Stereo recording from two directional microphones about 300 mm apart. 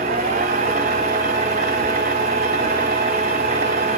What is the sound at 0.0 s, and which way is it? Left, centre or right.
Vehicle, right.